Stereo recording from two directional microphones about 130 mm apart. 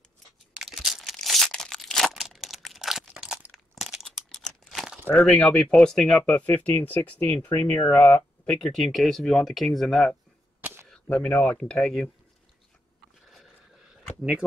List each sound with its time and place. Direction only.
0.6 s crumpling: centre (ahead or behind)
5.1 s speech: 5° left (ahead or behind)
10.6 s a sound: 15° right (ahead or behind)
10.9 s speech: 10° left (ahead or behind)